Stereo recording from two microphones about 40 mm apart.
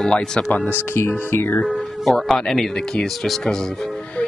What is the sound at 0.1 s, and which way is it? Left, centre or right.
Speech, centre.